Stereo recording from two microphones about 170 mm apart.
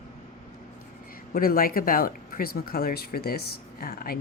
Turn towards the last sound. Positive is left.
turn(degrees=60)  # may be behind; listen again after turning